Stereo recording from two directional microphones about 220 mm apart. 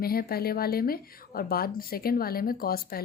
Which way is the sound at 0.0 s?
45° left (ahead or behind).